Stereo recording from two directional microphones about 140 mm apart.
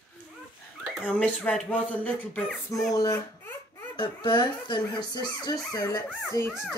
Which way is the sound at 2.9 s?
25° left (ahead or behind).